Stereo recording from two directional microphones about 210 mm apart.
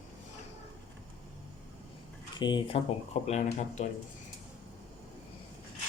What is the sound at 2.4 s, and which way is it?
Speech, 20° left (ahead or behind).